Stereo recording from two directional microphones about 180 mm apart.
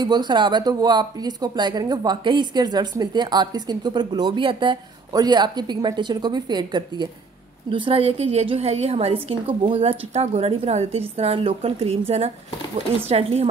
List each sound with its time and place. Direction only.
0.0 s a woman's voice: 25° right (ahead or behind)
13.1 s a woman's voice: 35° right (ahead or behind)